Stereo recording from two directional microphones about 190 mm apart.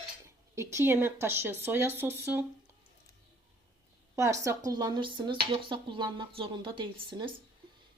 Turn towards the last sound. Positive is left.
turn(degrees=-25)  # may be behind; listen again after turning